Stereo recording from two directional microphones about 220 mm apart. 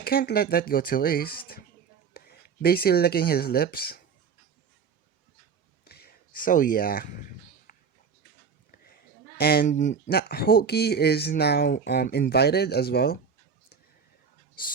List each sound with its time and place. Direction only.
0.0 s speech: 45° left (ahead or behind)
5.8 s a sound: 45° left (ahead or behind)
9.4 s speech: 45° left (ahead or behind)